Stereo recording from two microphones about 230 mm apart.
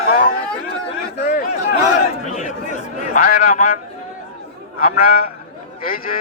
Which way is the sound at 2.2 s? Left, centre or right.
Left.